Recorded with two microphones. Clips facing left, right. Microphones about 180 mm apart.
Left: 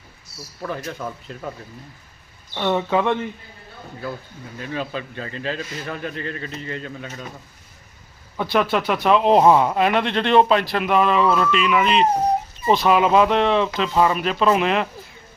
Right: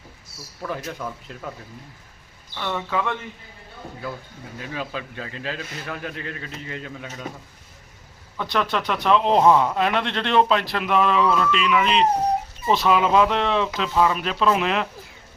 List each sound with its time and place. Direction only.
0.7 s speech: 5° right (ahead or behind)
2.6 s speech: 25° left (ahead or behind)
4.6 s speech: 5° right (ahead or behind)
8.4 s speech: 10° left (ahead or behind)